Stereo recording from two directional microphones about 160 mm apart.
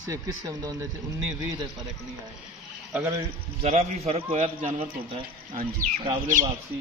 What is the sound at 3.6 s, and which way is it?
Speech, 40° right (ahead or behind).